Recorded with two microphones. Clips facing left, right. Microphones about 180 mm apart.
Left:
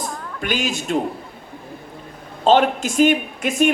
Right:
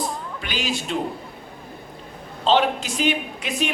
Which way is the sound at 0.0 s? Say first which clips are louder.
Left 1 dB; 50° left (ahead or behind).